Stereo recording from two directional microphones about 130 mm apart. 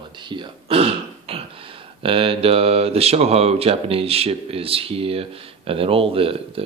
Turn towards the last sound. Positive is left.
turn(degrees=-45)  # may be behind; listen again after turning